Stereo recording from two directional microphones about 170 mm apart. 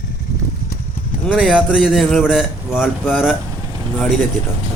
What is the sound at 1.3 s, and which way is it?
A man's voice, 5° right (ahead or behind).